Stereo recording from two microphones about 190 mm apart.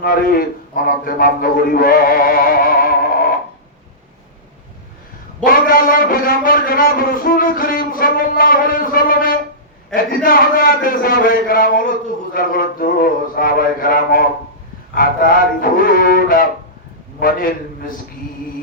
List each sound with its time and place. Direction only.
0.0 s a man's voice: 50° left (ahead or behind)
5.4 s a man's voice: 45° left (ahead or behind)